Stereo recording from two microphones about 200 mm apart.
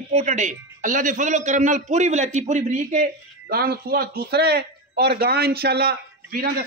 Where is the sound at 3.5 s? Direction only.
50° right (ahead or behind).